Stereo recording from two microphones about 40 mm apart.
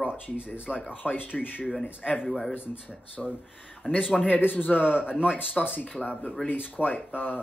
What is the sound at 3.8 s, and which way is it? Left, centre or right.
Speech, centre.